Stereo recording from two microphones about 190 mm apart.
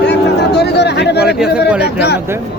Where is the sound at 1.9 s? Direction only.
60° left (ahead or behind).